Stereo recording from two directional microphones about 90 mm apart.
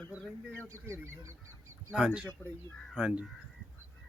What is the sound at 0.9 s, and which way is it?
Speech, 30° right (ahead or behind).